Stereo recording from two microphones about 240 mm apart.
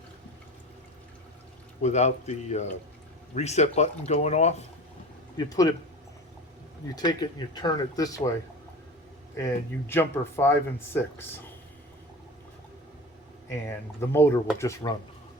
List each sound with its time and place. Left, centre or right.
1.8 s speech: left
5.4 s speech: centre
6.8 s speech: centre
9.9 s speech: centre
13.5 s speech: centre